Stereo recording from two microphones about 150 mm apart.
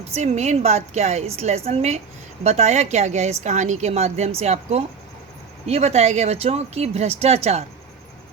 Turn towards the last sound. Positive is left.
turn(degrees=-45)  # may be behind; listen again after turning